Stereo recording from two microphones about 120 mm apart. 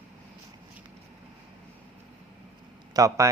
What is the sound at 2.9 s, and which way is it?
Speech, 30° right (ahead or behind).